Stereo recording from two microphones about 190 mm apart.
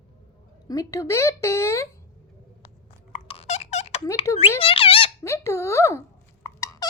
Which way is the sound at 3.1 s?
30° left (ahead or behind).